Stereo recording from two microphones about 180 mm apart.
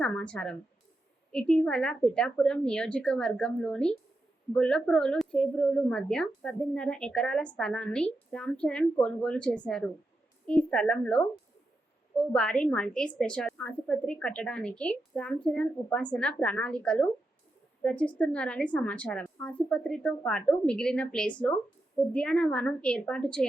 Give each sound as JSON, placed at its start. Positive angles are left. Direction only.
{"t": 0.0, "sound": "a woman's voice", "side_deg": 5}